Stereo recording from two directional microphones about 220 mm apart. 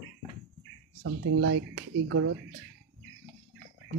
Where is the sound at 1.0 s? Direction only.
70° right (ahead or behind).